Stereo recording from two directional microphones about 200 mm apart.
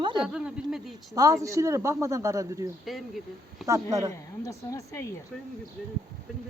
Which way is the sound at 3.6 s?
15° right (ahead or behind).